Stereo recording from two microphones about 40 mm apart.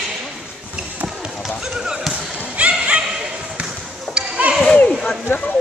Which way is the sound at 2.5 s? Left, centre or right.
Right.